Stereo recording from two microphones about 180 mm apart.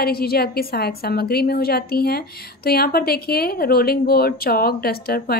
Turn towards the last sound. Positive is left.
turn(degrees=60)  # may be behind; listen again after turning